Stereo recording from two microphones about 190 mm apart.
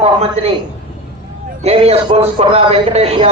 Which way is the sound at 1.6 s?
35° right (ahead or behind).